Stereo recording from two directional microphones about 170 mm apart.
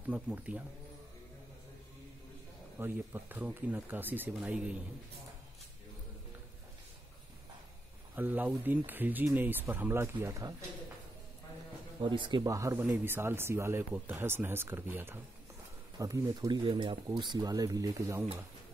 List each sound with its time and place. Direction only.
0.1 s speech: 10° right (ahead or behind)
2.8 s speech: 10° right (ahead or behind)
8.2 s speech: 10° right (ahead or behind)
12.0 s speech: 25° right (ahead or behind)
16.6 s speech: 30° right (ahead or behind)